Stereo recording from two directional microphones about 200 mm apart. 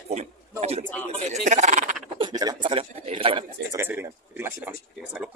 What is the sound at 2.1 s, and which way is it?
A man's voice, 20° right (ahead or behind).